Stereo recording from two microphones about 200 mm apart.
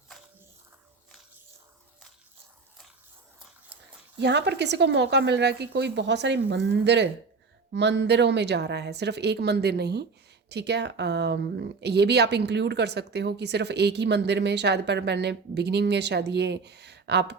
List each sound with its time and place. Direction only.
4.2 s speech: 55° right (ahead or behind)